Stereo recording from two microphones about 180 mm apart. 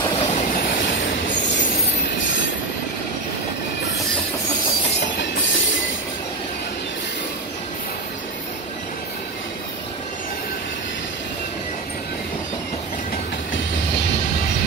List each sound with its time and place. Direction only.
0.2 s train: 40° left (ahead or behind)
5.2 s train: 90° left